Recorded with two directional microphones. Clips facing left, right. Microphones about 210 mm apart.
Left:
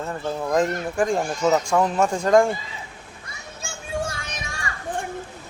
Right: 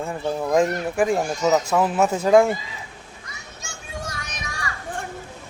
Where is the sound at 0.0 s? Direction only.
10° right (ahead or behind).